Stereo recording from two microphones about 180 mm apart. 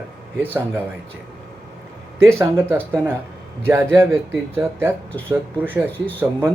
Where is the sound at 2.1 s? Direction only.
15° right (ahead or behind).